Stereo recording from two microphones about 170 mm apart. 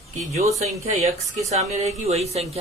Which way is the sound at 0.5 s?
40° right (ahead or behind).